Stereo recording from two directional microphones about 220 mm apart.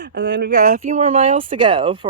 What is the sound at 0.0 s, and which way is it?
Speech, 50° right (ahead or behind).